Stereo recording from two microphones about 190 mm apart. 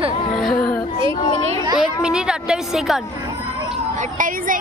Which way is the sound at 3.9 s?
45° right (ahead or behind).